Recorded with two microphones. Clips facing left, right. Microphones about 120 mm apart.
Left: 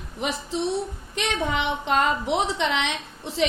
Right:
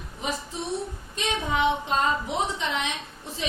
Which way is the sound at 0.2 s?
70° left (ahead or behind).